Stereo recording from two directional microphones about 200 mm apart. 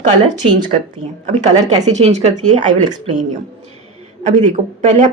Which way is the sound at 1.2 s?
35° right (ahead or behind).